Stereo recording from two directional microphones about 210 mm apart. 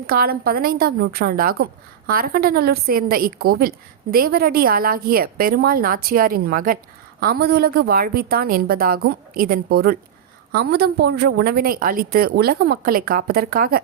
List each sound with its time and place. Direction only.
0.1 s a woman's voice: 45° right (ahead or behind)